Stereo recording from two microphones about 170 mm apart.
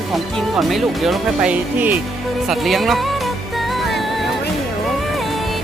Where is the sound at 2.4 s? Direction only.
Centre (ahead or behind).